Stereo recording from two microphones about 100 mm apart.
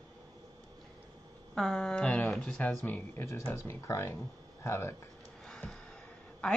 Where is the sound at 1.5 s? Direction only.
Centre (ahead or behind); by 3.3 s 15° left (ahead or behind).